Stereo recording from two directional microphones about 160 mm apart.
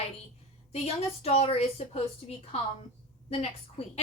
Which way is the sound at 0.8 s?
40° left (ahead or behind).